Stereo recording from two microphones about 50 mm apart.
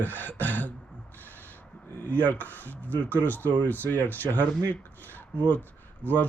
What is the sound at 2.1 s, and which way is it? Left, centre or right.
Speech, left.